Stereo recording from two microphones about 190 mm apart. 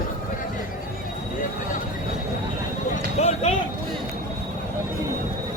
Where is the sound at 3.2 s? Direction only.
35° left (ahead or behind).